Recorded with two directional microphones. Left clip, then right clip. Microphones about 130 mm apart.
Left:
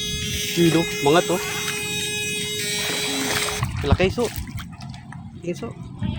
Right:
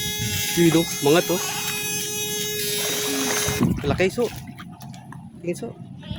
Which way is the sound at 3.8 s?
15° right (ahead or behind).